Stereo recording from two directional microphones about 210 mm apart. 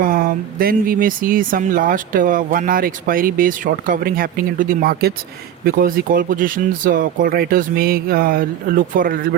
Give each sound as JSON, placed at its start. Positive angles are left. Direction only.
{"t": 0.0, "sound": "speech", "side_deg": -45}